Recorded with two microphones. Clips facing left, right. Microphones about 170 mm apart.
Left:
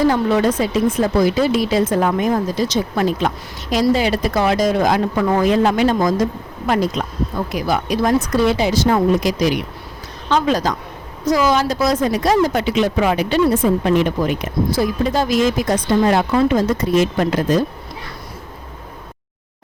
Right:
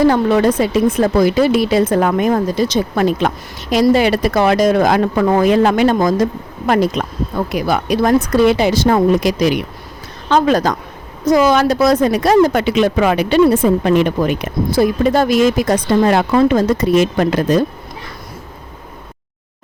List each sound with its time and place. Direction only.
0.1 s speech: 65° right (ahead or behind)